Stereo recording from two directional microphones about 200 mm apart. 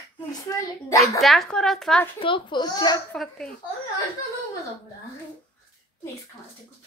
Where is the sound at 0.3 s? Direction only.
15° left (ahead or behind).